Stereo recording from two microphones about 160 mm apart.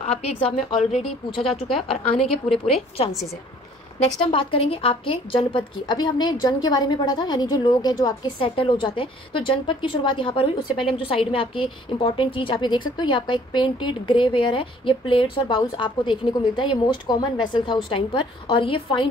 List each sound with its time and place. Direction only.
0.0 s a woman's voice: 40° left (ahead or behind)
2.3 s a woman's voice: 35° left (ahead or behind)
4.3 s a woman's voice: 35° left (ahead or behind)